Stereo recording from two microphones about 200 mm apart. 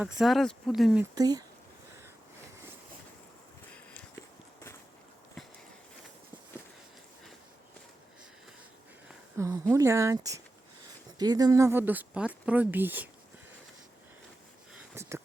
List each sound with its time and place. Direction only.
0.0 s speech: centre (ahead or behind)
1.1 s speech: 20° right (ahead or behind)
9.4 s speech: 15° right (ahead or behind)
15.0 s a sound: 15° right (ahead or behind)